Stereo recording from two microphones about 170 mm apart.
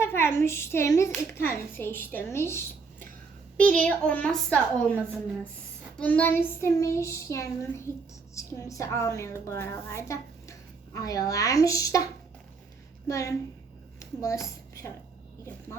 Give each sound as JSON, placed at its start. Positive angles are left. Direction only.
{"t": 0.0, "sound": "a child's voice", "side_deg": 15}
{"t": 6.0, "sound": "a child's voice", "side_deg": 10}
{"t": 13.1, "sound": "a woman's voice", "side_deg": 20}